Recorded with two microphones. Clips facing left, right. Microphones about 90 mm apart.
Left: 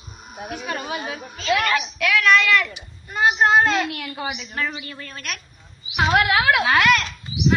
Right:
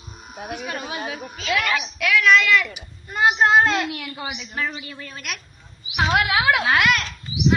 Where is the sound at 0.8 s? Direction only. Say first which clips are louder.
Left 1 dB; 45° left (ahead or behind).